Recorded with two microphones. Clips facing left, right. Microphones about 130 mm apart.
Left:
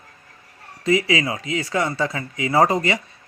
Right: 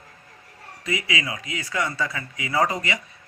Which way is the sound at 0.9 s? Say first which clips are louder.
Left 8 dB; 30° left (ahead or behind).